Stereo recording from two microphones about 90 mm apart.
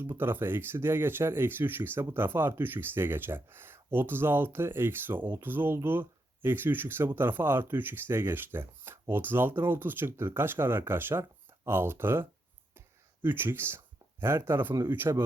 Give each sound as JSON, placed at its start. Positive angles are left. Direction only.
{"t": 0.0, "sound": "speech", "side_deg": -25}